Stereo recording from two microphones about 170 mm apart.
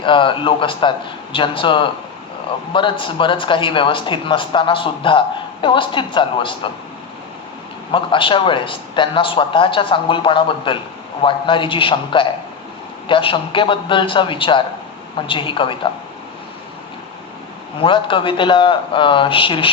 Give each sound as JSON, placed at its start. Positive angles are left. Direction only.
{"t": 0.0, "sound": "a man's voice", "side_deg": 30}
{"t": 3.0, "sound": "a man's voice", "side_deg": 30}
{"t": 7.9, "sound": "a man's voice", "side_deg": 30}
{"t": 17.8, "sound": "a man's voice", "side_deg": 30}